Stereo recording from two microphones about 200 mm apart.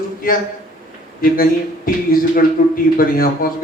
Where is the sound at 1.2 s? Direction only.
45° left (ahead or behind).